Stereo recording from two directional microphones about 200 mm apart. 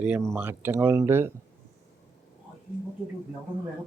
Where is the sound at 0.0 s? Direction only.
5° right (ahead or behind).